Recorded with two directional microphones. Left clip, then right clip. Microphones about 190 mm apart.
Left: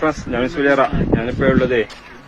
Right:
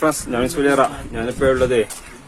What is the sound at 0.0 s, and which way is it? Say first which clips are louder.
Speech: even; 20° right (ahead or behind).